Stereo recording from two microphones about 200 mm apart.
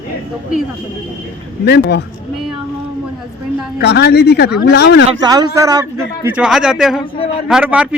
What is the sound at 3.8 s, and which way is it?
A man's voice, 55° left (ahead or behind).